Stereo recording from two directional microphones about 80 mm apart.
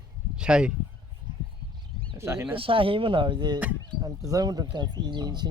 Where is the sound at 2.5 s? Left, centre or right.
Right.